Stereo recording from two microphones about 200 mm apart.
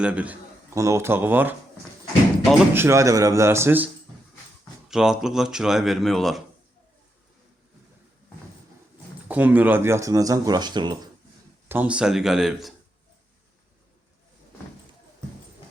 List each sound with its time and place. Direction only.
0.0 s a man's voice: 5° right (ahead or behind)
2.7 s speech: 15° right (ahead or behind)
4.9 s speech: 5° right (ahead or behind)
9.3 s speech: 10° right (ahead or behind)
11.7 s speech: 5° right (ahead or behind)